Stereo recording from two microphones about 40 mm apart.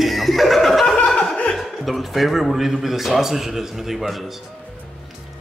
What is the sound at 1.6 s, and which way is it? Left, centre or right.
A man's voice, centre.